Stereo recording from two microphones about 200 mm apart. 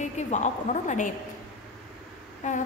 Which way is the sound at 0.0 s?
35° left (ahead or behind).